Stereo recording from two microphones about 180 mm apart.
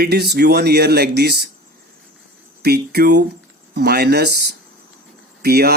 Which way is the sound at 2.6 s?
65° right (ahead or behind).